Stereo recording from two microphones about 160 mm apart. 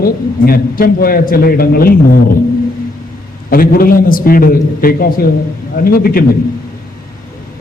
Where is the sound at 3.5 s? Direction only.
65° left (ahead or behind).